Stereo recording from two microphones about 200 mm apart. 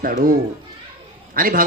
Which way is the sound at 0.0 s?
45° right (ahead or behind).